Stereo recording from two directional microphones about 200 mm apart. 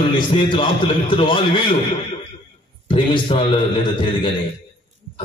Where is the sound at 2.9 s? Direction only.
25° left (ahead or behind).